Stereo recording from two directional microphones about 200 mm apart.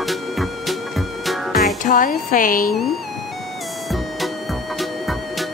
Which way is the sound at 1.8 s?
40° left (ahead or behind).